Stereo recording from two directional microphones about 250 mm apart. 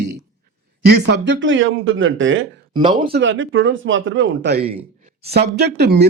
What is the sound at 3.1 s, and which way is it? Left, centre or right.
Speech, right.